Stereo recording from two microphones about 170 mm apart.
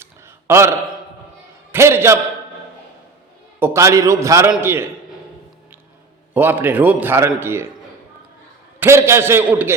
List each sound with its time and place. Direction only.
0.0 s a sound: 15° right (ahead or behind)
3.6 s a man's voice: 15° right (ahead or behind)
6.3 s a man's voice: 10° right (ahead or behind)
8.8 s a man's voice: 15° right (ahead or behind)